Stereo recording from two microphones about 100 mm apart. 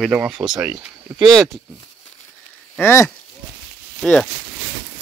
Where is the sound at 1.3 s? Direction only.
Centre (ahead or behind).